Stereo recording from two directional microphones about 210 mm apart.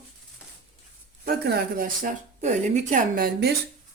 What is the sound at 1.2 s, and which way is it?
Speech, 50° right (ahead or behind).